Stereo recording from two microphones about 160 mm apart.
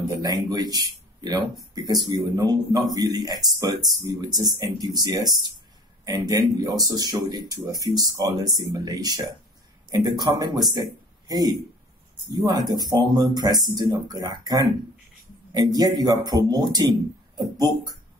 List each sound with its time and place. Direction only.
0.1 s speech: 20° right (ahead or behind)